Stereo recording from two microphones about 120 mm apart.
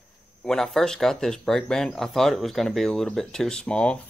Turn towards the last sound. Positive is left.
turn(degrees=10)  # may be behind; listen again after turning